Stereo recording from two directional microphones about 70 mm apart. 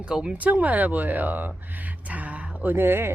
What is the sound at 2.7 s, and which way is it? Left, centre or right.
Speech, right.